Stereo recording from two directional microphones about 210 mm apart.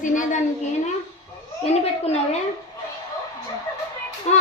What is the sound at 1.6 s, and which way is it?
Speech, 30° left (ahead or behind).